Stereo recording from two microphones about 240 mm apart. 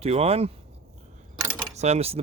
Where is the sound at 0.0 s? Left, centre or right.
Right.